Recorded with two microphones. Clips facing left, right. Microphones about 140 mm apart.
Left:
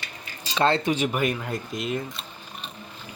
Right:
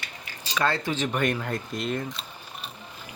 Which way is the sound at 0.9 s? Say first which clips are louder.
Left 1 dB; 10° left (ahead or behind).